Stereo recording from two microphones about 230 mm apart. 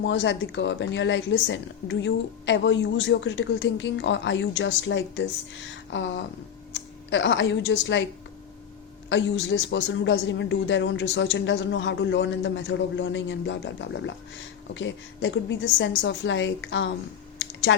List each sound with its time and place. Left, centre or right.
0.0 s a man's voice: left
9.0 s a man's voice: left
17.4 s computer keyboard: left